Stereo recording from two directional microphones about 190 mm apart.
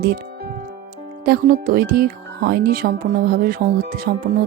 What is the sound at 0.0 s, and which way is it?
Music, 50° right (ahead or behind).